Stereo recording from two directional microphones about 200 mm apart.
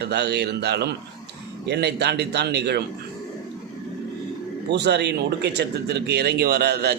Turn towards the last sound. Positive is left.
turn(degrees=-50)  # may be behind; listen again after turning